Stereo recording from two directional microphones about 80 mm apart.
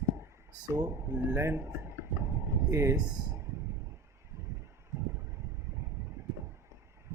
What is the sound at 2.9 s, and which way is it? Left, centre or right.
Speech, right.